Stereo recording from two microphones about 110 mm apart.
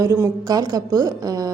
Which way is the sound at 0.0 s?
30° right (ahead or behind).